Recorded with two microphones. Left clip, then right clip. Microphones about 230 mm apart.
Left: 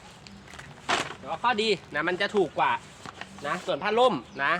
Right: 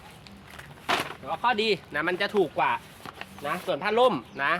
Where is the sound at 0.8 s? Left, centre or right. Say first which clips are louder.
Right 1 dB; right.